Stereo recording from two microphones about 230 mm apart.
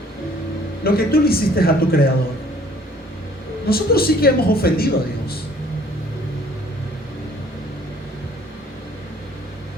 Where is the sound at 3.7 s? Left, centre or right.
Left.